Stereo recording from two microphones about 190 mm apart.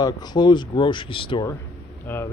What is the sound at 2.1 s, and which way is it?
Speech, 10° left (ahead or behind).